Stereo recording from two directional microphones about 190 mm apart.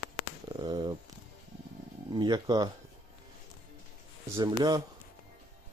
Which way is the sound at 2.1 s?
20° right (ahead or behind).